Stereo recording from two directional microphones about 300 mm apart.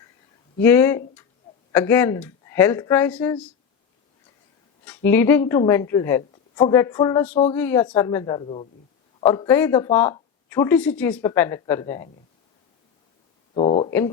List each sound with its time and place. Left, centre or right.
0.6 s speech: centre
4.9 s speech: centre
13.5 s a sound: centre